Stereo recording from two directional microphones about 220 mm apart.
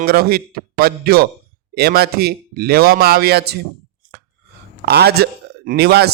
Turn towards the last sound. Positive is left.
turn(degrees=-45)  # may be behind; listen again after turning